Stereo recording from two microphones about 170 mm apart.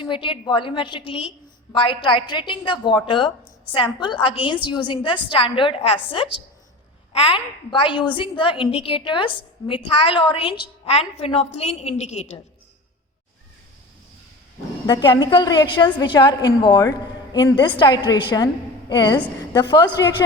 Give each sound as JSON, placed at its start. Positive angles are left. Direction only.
{"t": 0.0, "sound": "a woman's voice", "side_deg": 30}
{"t": 14.8, "sound": "a woman's voice", "side_deg": 25}